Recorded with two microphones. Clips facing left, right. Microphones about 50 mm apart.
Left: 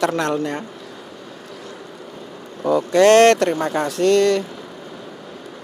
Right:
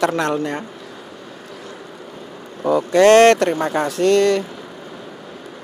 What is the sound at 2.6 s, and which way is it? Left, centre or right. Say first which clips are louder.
Speech: right 1 dB; centre.